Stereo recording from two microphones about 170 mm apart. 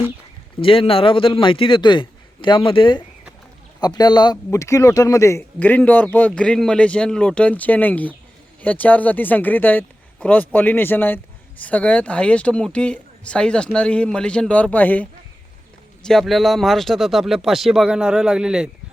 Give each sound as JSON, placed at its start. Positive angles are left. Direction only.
{"t": 0.6, "sound": "a man's voice", "side_deg": 30}
{"t": 16.0, "sound": "speech", "side_deg": 0}